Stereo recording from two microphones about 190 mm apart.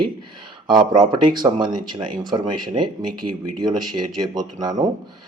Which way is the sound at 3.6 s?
20° right (ahead or behind).